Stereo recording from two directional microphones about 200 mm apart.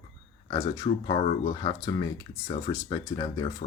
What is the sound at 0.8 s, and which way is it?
Speech, 30° left (ahead or behind).